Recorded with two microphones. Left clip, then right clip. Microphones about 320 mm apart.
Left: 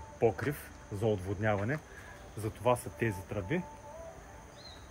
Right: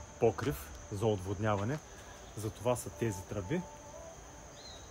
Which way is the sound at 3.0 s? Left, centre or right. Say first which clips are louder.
Left 2 dB; right.